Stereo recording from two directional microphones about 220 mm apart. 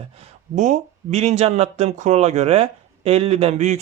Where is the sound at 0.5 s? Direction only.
35° right (ahead or behind).